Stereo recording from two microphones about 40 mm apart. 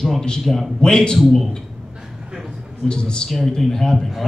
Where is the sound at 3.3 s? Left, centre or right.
Centre.